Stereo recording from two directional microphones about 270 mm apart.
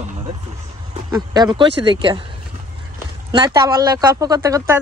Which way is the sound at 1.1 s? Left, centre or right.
Centre.